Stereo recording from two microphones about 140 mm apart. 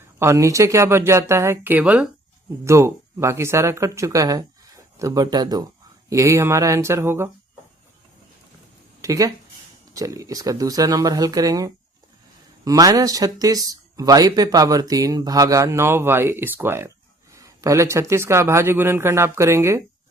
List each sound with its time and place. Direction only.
0.2 s speech: 20° right (ahead or behind)
2.6 s speech: 20° right (ahead or behind)
9.0 s a sound: 25° right (ahead or behind)
9.9 s speech: 25° right (ahead or behind)